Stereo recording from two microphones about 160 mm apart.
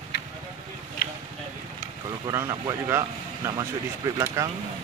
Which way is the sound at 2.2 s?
15° right (ahead or behind).